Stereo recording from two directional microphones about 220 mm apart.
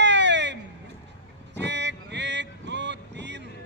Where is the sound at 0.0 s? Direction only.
50° right (ahead or behind).